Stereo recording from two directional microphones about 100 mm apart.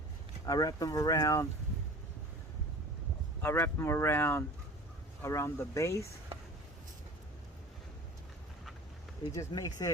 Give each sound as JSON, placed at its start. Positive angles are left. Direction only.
{"t": 0.4, "sound": "speech", "side_deg": 40}
{"t": 3.4, "sound": "speech", "side_deg": 25}
{"t": 9.3, "sound": "speech", "side_deg": 35}